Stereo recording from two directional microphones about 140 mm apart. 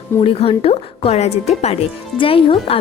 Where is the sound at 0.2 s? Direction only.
40° left (ahead or behind).